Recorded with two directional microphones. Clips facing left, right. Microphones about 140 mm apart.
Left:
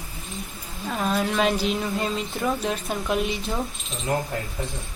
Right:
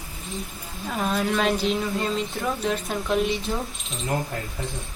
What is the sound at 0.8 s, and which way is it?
Speech, centre (ahead or behind).